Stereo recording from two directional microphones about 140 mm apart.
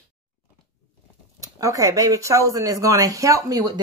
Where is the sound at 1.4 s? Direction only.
25° right (ahead or behind).